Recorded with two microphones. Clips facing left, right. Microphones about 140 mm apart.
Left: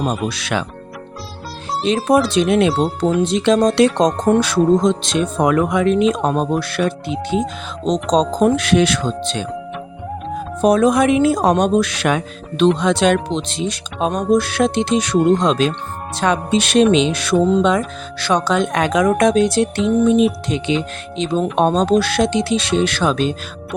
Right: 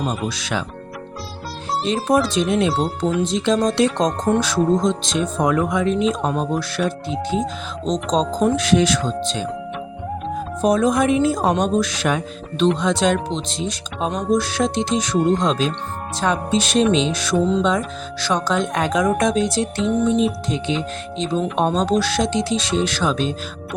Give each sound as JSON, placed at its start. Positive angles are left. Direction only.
{"t": 0.3, "sound": "speech", "side_deg": 65}
{"t": 2.0, "sound": "music", "side_deg": 70}
{"t": 10.6, "sound": "music", "side_deg": 70}
{"t": 21.6, "sound": "speech", "side_deg": 65}